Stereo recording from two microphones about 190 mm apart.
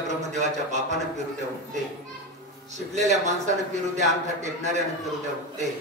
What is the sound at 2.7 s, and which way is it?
A man's voice, 40° right (ahead or behind).